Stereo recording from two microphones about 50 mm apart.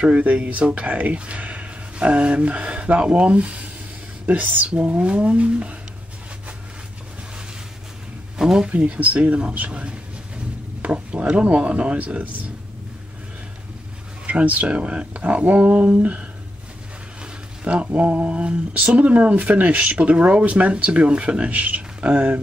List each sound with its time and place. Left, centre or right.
0.0 s speech: right
8.4 s speech: centre
8.6 s speech: right
14.2 s speech: right